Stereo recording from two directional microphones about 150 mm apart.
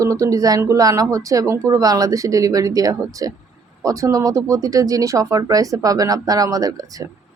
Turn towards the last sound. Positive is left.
turn(degrees=-25)  # may be behind; listen again after turning